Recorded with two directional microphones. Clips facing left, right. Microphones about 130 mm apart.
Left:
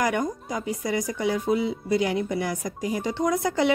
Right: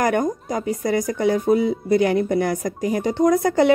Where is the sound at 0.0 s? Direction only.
50° right (ahead or behind).